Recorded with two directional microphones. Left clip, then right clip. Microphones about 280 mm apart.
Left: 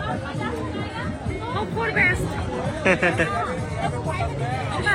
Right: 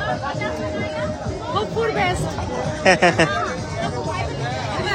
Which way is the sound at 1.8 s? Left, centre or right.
Centre.